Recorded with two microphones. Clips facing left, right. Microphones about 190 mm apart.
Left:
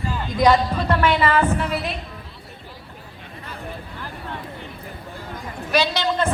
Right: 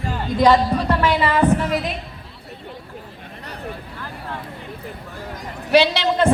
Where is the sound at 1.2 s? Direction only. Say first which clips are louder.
Right 2 dB; 15° right (ahead or behind).